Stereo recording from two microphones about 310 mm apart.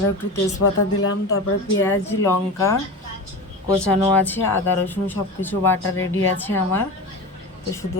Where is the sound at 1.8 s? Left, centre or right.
Centre.